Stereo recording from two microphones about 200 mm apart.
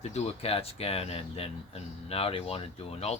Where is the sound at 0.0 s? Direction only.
30° left (ahead or behind).